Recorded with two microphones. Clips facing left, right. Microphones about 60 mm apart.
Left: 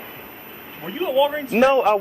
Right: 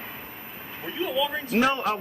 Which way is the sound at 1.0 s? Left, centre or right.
Left.